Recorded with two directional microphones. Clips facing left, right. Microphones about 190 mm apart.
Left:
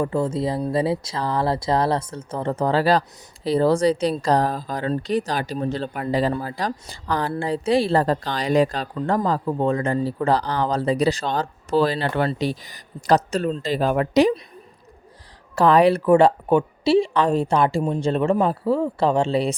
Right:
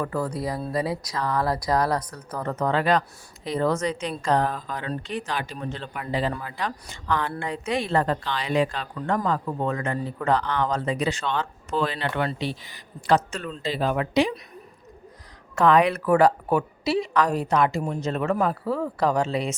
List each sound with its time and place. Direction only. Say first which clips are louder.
0.0 s a woman's voice: left 5 dB; 25° left (ahead or behind); by 14.3 s 40° left (ahead or behind)
15.5 s a woman's voice: left 4 dB; 35° left (ahead or behind)